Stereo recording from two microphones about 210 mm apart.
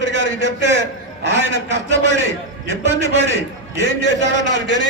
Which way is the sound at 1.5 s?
60° left (ahead or behind).